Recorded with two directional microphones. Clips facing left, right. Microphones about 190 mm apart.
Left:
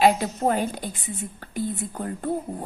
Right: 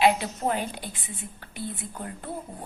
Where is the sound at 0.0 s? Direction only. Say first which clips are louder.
Left 3 dB; 45° left (ahead or behind).